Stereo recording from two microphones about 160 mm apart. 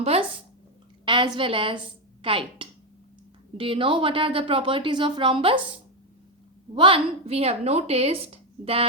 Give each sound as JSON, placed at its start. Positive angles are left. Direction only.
{"t": 0.0, "sound": "a sound", "side_deg": -40}
{"t": 1.4, "sound": "a woman's voice", "side_deg": -35}
{"t": 6.7, "sound": "a woman's voice", "side_deg": -35}